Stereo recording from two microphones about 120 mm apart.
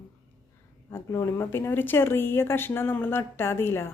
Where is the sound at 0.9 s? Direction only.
25° left (ahead or behind).